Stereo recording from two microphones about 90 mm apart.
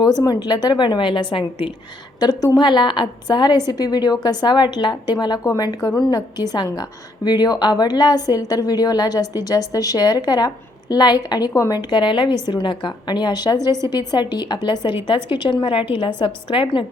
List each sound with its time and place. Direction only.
0.2 s a woman's voice: 45° left (ahead or behind); by 1.7 s 75° left (ahead or behind)
2.6 s a woman's voice: 60° left (ahead or behind)